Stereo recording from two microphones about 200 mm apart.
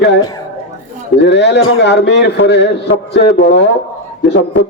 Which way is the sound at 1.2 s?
60° left (ahead or behind).